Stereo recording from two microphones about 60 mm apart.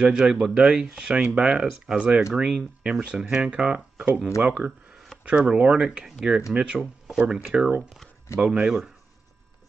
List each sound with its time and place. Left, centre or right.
0.0 s speech: centre
4.6 s speech: right
5.2 s speech: centre